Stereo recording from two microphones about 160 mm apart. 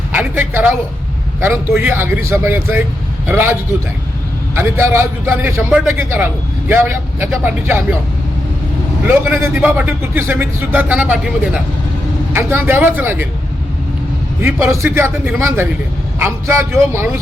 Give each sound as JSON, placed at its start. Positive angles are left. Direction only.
{"t": 0.1, "sound": "a sound", "side_deg": -10}
{"t": 1.4, "sound": "speech", "side_deg": -15}
{"t": 9.0, "sound": "speech", "side_deg": -15}
{"t": 14.4, "sound": "speech", "side_deg": -15}